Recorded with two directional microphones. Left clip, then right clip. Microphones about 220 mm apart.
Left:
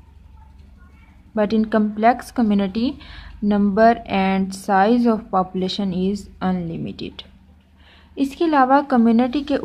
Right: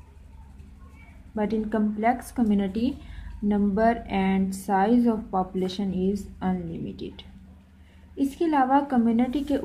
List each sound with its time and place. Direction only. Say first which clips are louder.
1.3 s speech: left 8 dB; 25° left (ahead or behind)